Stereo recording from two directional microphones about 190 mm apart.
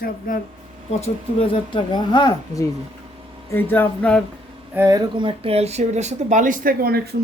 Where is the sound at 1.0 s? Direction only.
30° left (ahead or behind).